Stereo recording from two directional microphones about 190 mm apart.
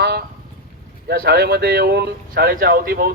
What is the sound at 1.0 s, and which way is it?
Speech, 55° right (ahead or behind).